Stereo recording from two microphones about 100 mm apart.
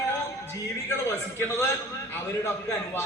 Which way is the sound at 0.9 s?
25° left (ahead or behind).